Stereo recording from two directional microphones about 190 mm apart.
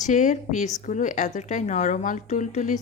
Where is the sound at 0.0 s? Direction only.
40° left (ahead or behind).